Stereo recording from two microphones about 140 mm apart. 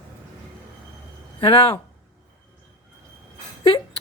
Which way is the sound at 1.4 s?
35° left (ahead or behind).